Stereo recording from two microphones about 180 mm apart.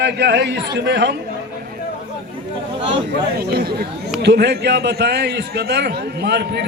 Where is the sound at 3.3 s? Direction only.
60° right (ahead or behind).